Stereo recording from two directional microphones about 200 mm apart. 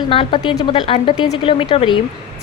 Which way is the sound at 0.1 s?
25° left (ahead or behind).